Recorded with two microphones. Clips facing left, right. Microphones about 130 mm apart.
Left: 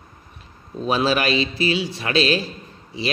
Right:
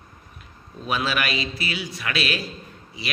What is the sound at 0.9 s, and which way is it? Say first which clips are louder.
A man's voice: left 6 dB; 30° left (ahead or behind).